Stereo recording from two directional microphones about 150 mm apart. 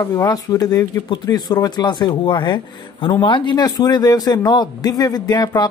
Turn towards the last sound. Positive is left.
turn(degrees=25)  # may be behind; listen again after turning